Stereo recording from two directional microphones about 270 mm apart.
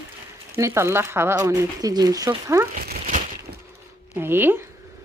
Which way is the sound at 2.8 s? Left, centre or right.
Right.